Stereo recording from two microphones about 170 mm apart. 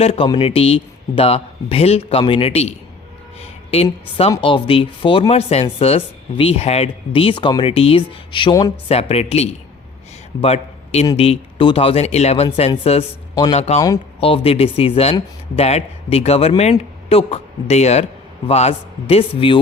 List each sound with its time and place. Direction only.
0.0 s speech: 30° left (ahead or behind)
8.9 s a man's voice: 35° left (ahead or behind)
13.3 s speech: 25° left (ahead or behind)
14.2 s speech: 35° left (ahead or behind)